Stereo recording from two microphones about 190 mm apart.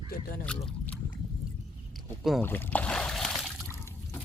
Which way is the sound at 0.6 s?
5° left (ahead or behind).